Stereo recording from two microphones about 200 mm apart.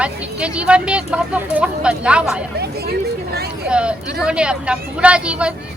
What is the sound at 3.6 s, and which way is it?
Speech, 5° right (ahead or behind).